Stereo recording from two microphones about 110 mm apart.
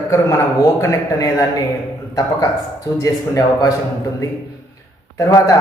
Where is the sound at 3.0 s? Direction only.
30° left (ahead or behind).